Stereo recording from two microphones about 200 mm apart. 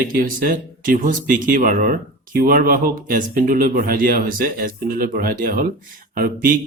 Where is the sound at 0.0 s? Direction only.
45° right (ahead or behind).